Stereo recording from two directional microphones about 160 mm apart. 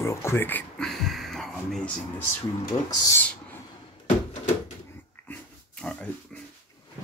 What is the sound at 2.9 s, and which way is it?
Speech, 20° left (ahead or behind).